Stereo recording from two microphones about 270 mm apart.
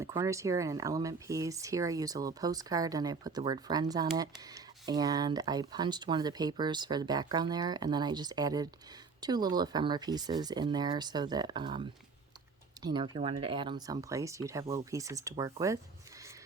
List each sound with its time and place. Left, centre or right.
0.0 s speech: centre